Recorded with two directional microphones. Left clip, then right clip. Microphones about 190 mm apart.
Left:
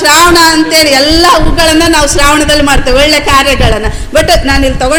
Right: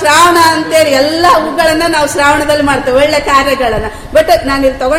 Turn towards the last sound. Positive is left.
turn(degrees=35)  # may be behind; listen again after turning